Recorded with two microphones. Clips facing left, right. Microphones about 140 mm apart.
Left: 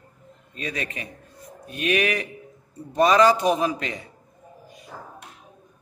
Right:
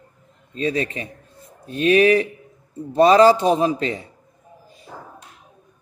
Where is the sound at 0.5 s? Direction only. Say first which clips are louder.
Right 9 dB; 30° right (ahead or behind).